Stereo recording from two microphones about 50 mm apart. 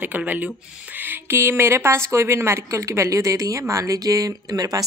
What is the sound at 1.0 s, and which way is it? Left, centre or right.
Speech, right.